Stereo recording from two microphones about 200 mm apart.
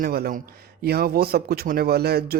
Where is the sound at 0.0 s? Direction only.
50° right (ahead or behind).